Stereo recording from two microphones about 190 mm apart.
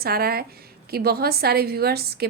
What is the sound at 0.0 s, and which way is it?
A woman's voice, 55° right (ahead or behind).